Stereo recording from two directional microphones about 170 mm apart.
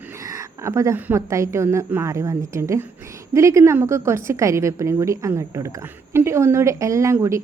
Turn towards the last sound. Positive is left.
turn(degrees=-15)  # may be behind; listen again after turning